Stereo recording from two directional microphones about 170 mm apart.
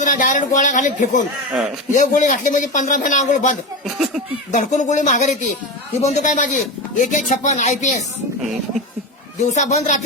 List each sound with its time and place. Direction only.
0.0 s a man's voice: 50° left (ahead or behind)
3.8 s speech: 5° right (ahead or behind)
4.5 s a man's voice: 45° left (ahead or behind)
9.6 s a man's voice: 45° left (ahead or behind)